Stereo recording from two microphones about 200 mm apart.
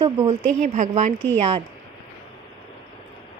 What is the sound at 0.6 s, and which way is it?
A woman's voice, 40° right (ahead or behind).